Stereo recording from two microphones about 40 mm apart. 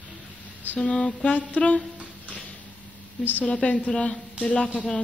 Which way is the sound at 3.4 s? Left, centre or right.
Left.